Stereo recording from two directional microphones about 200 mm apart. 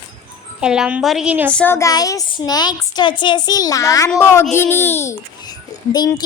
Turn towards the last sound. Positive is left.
turn(degrees=20)  # may be behind; listen again after turning